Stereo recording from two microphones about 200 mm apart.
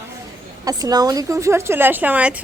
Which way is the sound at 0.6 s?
20° right (ahead or behind).